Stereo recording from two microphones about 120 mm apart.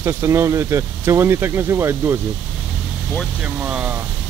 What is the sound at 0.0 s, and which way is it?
Speech, 25° right (ahead or behind).